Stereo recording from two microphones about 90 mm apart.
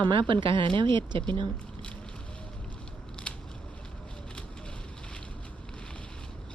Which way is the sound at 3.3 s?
10° left (ahead or behind).